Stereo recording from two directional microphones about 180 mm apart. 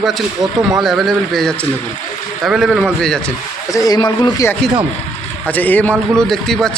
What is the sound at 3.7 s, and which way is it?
Speech, 20° left (ahead or behind).